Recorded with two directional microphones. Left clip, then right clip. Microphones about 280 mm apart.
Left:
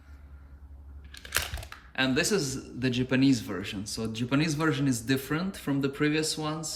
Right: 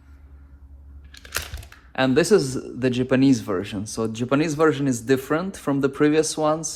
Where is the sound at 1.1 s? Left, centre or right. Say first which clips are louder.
Right 1 dB; centre.